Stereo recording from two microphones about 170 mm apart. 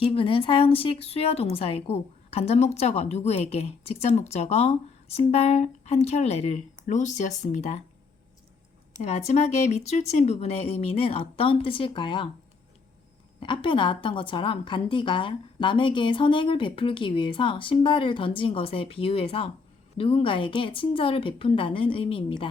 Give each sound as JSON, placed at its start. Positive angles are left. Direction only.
{"t": 0.0, "sound": "a woman's voice", "side_deg": 35}
{"t": 9.0, "sound": "a woman's voice", "side_deg": 40}
{"t": 13.4, "sound": "a woman's voice", "side_deg": 30}